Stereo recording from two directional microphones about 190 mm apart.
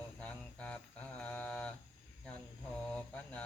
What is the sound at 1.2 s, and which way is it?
Mantra, 5° left (ahead or behind).